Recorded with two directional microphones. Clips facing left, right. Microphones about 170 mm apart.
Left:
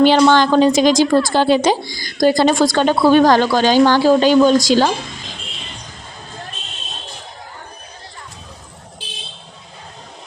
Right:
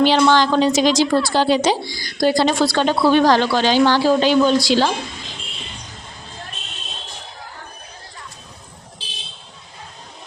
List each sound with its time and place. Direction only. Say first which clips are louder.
0.0 s a woman's voice: left 3 dB; 50° left (ahead or behind)